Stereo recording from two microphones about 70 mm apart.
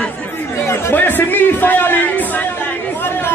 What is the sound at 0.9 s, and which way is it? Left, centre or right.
A man's voice, left.